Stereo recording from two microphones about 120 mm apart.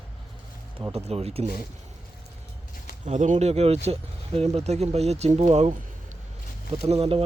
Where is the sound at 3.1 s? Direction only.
85° right; by 5.7 s 65° right (ahead or behind).